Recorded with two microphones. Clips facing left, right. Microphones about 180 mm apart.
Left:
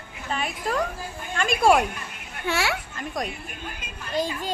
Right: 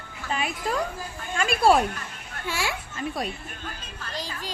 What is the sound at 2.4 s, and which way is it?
Speech, 70° left (ahead or behind).